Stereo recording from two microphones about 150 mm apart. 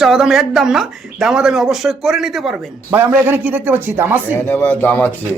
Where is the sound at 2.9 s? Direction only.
15° right (ahead or behind).